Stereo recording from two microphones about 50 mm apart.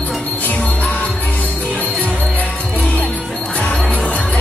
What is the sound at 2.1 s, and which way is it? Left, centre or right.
Music, left.